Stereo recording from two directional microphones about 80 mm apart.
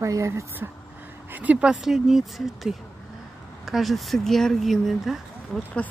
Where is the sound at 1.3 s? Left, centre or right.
Centre.